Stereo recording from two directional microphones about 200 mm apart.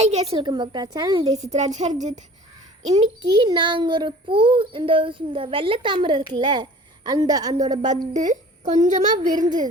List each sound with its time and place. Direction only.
0.0 s a woman's voice: 35° right (ahead or behind)
0.3 s a child's voice: 20° right (ahead or behind)
1.4 s a woman's voice: 35° right (ahead or behind)
3.2 s a child's voice: 25° right (ahead or behind)
7.5 s a woman's voice: 35° right (ahead or behind)